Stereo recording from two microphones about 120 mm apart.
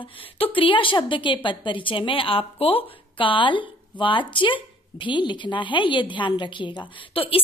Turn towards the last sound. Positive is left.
turn(degrees=50)  # may be behind; listen again after turning